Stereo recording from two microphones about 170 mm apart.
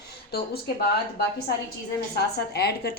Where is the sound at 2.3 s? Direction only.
75° left (ahead or behind).